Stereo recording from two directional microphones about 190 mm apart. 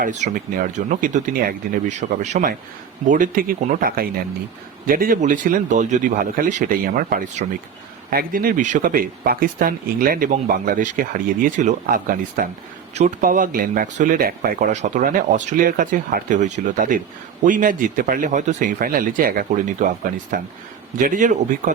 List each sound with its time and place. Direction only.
0.0 s speech: 45° right (ahead or behind)